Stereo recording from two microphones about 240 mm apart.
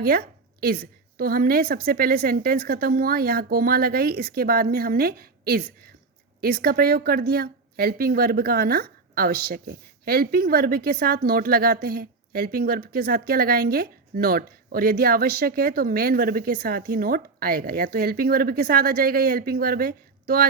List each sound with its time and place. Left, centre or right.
0.0 s speech: right